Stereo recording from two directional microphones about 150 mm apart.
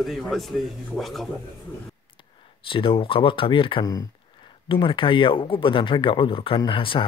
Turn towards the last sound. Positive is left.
turn(degrees=35)  # may be behind; listen again after turning